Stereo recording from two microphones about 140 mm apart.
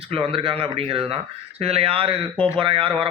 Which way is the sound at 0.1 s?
40° right (ahead or behind).